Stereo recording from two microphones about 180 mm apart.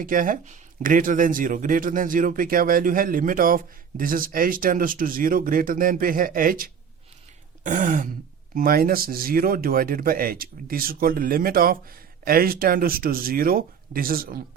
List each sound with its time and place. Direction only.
0.0 s speech: 50° right (ahead or behind)